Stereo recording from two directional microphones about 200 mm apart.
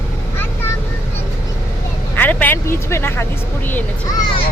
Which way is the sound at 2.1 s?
10° left (ahead or behind).